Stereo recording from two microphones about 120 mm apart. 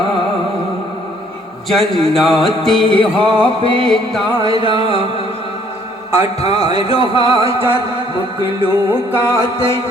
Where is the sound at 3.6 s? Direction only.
50° right (ahead or behind).